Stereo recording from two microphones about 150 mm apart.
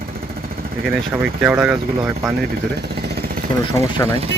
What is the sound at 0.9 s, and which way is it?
Speech, 15° right (ahead or behind).